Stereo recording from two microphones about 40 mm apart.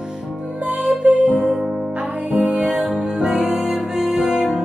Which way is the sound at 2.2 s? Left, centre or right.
Right.